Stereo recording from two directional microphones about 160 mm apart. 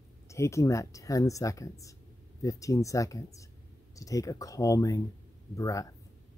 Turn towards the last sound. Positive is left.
turn(degrees=20)  # may be behind; listen again after turning